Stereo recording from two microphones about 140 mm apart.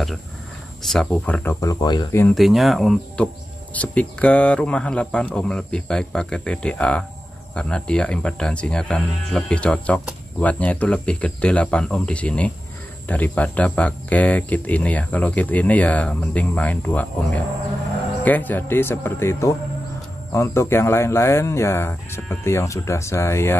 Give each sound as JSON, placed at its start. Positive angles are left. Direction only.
{"t": 0.8, "sound": "speech", "side_deg": 5}
{"t": 2.3, "sound": "speech", "side_deg": 0}